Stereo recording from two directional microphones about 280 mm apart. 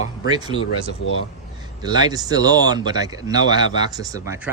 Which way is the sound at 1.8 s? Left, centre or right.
Centre.